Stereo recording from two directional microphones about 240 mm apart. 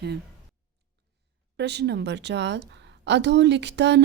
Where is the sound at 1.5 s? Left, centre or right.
Right.